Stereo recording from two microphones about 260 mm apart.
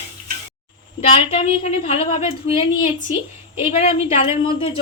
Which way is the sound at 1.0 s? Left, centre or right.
Left.